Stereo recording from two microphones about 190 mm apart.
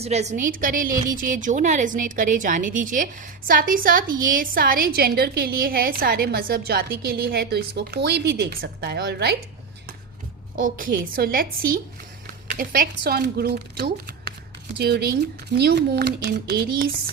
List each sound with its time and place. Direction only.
0.0 s a woman's voice: 35° right (ahead or behind); by 9.3 s 60° right (ahead or behind)
10.6 s a woman's voice: 45° right (ahead or behind)